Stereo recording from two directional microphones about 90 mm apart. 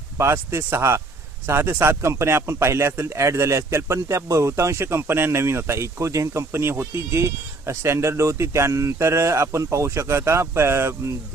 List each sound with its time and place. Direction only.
0.2 s speech: 30° right (ahead or behind)